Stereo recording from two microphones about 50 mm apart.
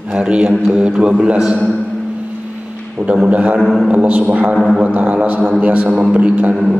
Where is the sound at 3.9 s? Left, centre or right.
Right.